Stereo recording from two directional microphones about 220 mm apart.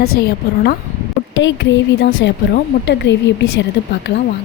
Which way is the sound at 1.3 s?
55° left (ahead or behind).